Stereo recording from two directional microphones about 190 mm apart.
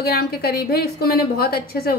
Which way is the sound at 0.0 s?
55° left (ahead or behind).